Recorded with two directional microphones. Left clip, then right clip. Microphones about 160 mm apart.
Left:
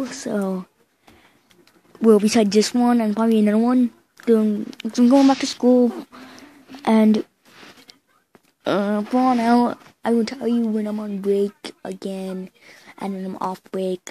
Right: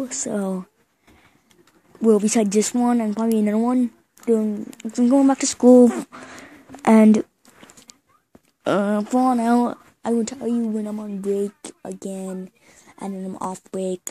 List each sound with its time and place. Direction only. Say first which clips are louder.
0.1 s speech: left 1 dB; centre (ahead or behind)
2.0 s speech: left 2 dB; 10° left (ahead or behind)
5.4 s speech: right 2 dB; 20° right (ahead or behind)
5.7 s speech: right 5 dB; 40° right (ahead or behind); by 7.2 s 20° right (ahead or behind)
8.6 s speech: right 1 dB; 10° right (ahead or behind)
9.7 s speech: left 2 dB; centre (ahead or behind)